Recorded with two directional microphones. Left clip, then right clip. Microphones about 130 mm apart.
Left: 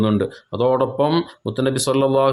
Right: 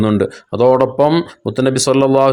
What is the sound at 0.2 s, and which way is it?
Speech, 40° right (ahead or behind).